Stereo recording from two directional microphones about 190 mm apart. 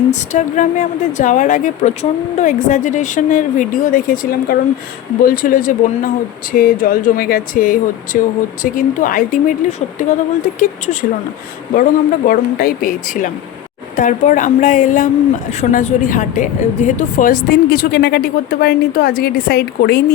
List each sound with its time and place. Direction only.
0.1 s a woman's voice: 40° left (ahead or behind); by 20.1 s 55° left (ahead or behind)